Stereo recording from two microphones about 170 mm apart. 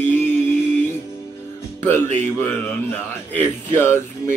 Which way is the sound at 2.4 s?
10° left (ahead or behind).